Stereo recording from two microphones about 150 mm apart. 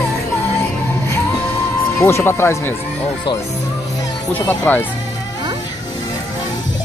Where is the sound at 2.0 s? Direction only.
15° left (ahead or behind).